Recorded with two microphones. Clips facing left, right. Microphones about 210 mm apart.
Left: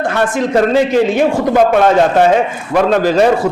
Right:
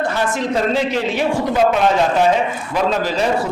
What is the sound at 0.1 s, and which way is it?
A man's voice, 60° left (ahead or behind).